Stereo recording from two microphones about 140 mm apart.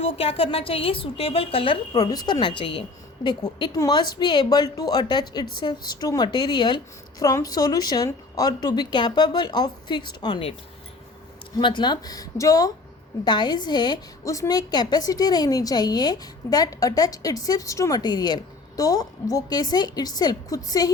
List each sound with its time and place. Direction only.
0.0 s a woman's voice: 40° left (ahead or behind)
11.6 s a woman's voice: 35° left (ahead or behind)